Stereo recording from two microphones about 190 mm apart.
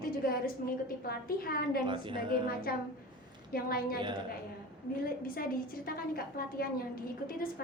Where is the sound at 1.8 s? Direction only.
25° right (ahead or behind).